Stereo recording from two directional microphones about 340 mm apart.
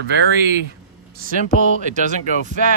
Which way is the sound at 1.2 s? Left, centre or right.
Right.